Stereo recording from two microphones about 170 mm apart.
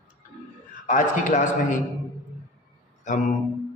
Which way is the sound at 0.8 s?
50° left (ahead or behind).